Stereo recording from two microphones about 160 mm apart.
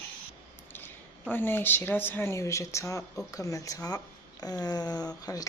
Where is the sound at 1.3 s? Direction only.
15° left (ahead or behind).